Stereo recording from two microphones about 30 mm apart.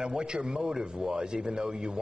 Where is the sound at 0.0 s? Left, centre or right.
Right.